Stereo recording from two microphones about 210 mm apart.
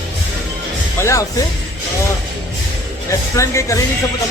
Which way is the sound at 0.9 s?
15° left (ahead or behind).